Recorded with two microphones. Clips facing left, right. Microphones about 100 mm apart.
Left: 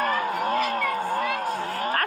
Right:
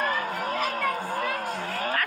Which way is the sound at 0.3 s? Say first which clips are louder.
Left 4 dB; 10° left (ahead or behind).